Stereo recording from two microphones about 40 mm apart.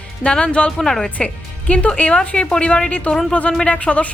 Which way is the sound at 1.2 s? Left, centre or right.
Left.